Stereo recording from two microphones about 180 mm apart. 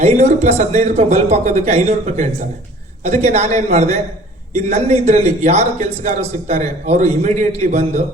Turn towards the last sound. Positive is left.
turn(degrees=-40)  # may be behind; listen again after turning